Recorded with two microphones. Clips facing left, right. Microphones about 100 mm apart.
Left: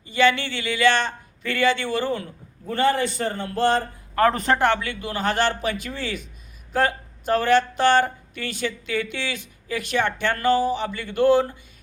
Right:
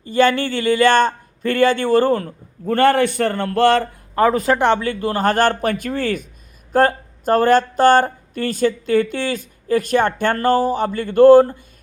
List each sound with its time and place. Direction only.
0.0 s speech: 45° right (ahead or behind); by 3.8 s 75° right (ahead or behind)
4.3 s speech: 5° right (ahead or behind)
4.5 s speech: 20° right (ahead or behind)
4.8 s speech: 40° right (ahead or behind)